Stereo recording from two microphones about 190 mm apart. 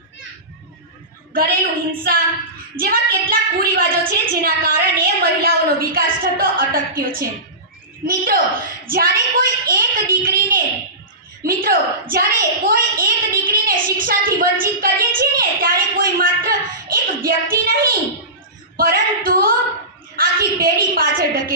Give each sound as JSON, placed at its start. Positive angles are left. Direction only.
{"t": 1.3, "sound": "a woman's voice", "side_deg": -50}
{"t": 11.4, "sound": "a sound", "side_deg": -50}
{"t": 20.1, "sound": "a woman's voice", "side_deg": -50}